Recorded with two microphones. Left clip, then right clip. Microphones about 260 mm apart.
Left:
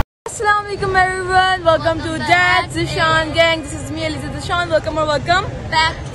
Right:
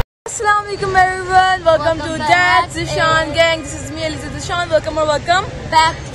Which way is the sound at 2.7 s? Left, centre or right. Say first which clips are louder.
Right 1 dB; centre.